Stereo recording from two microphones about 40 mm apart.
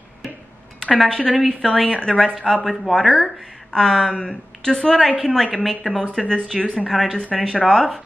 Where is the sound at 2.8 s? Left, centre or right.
Centre.